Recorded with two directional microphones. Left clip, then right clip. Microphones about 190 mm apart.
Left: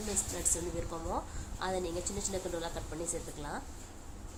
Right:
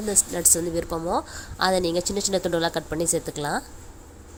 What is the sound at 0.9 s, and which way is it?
A woman's voice, 45° right (ahead or behind).